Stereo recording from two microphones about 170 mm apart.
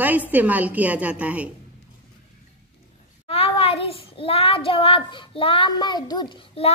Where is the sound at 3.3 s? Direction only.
35° left (ahead or behind).